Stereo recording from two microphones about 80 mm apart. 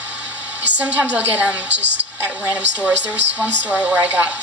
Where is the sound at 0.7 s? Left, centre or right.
Centre.